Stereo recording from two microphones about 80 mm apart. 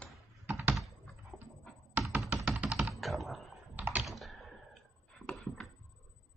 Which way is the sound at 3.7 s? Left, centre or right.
Centre.